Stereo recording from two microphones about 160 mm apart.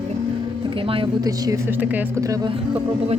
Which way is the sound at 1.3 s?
20° right (ahead or behind).